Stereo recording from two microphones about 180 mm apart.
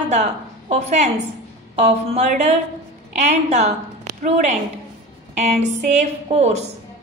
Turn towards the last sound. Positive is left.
turn(degrees=-40)  # may be behind; listen again after turning